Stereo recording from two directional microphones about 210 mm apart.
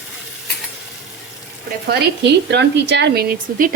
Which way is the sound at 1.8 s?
50° right (ahead or behind).